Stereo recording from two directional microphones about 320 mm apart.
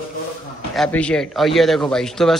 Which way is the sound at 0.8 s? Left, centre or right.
Centre.